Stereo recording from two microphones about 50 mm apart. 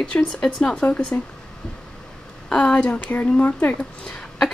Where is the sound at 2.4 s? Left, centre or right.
Centre.